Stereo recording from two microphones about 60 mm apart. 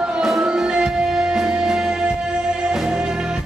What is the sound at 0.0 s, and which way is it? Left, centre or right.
Music, centre.